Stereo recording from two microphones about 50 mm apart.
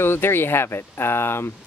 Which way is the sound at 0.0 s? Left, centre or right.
Left.